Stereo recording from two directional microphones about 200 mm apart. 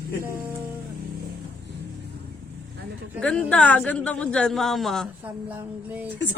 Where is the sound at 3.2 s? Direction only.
5° left (ahead or behind).